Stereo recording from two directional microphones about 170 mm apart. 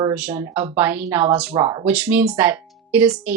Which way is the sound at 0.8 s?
10° right (ahead or behind).